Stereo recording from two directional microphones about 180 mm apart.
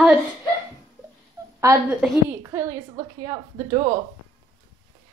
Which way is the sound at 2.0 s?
10° right (ahead or behind).